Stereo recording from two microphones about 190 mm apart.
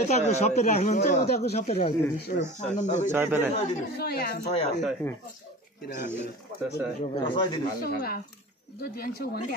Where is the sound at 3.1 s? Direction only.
10° right (ahead or behind).